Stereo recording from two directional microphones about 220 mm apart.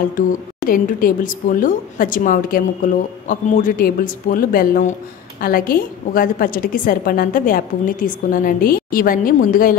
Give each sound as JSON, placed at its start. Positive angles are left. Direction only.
{"t": 0.7, "sound": "a woman's voice", "side_deg": 40}